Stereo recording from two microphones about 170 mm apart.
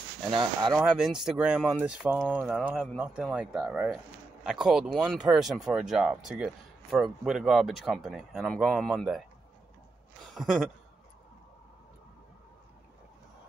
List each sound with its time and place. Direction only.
0.3 s speech: 30° right (ahead or behind)
0.7 s speech: 5° right (ahead or behind)
10.2 s a sound: centre (ahead or behind)